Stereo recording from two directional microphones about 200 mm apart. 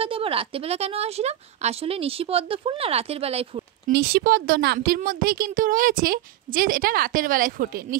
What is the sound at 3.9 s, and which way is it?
Speech, 50° right (ahead or behind).